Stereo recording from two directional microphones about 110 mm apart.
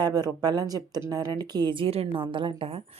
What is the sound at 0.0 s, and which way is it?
A woman's voice, 35° right (ahead or behind).